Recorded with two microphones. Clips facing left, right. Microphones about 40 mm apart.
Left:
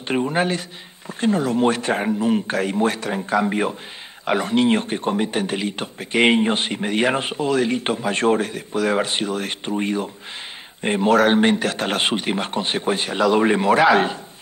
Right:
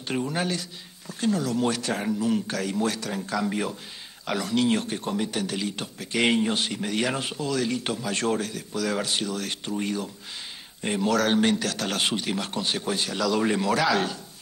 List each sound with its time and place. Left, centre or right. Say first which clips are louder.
0.1 s a man's voice: left 7 dB; left